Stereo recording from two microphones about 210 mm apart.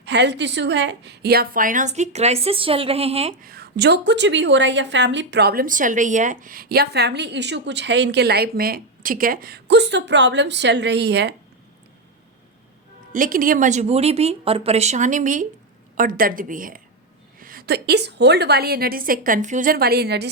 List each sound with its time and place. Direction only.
0.0 s a woman's voice: 55° right (ahead or behind); by 3.3 s 30° right (ahead or behind)
3.4 s a woman's voice: 45° right (ahead or behind)
13.1 s a woman's voice: 40° right (ahead or behind)